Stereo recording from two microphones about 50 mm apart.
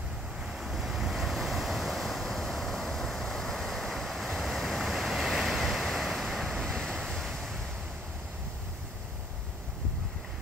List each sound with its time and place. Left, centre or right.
0.5 s waves: centre